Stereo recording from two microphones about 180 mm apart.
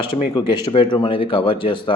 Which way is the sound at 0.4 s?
25° left (ahead or behind).